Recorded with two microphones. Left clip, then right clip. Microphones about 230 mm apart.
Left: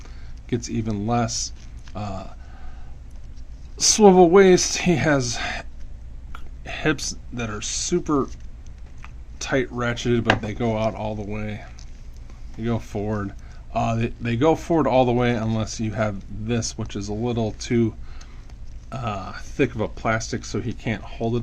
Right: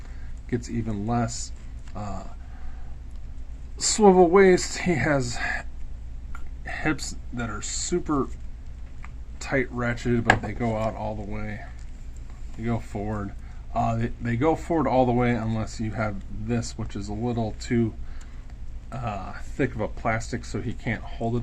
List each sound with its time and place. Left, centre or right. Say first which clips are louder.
0.9 s speech: left 5 dB; left
3.8 s speech: left 4 dB; left
6.7 s speech: left 4 dB; left
12.6 s speech: left 4 dB; left